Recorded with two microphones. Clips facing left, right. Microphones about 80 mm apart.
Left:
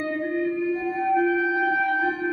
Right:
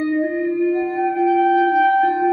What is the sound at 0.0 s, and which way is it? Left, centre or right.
Music, centre.